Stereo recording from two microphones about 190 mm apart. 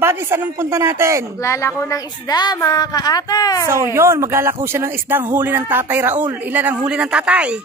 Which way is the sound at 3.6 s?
15° right (ahead or behind).